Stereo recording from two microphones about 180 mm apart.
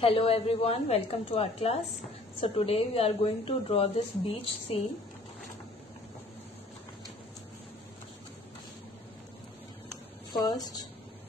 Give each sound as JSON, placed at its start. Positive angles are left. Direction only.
{"t": 0.0, "sound": "a woman's voice", "side_deg": 30}
{"t": 10.4, "sound": "a woman's voice", "side_deg": 20}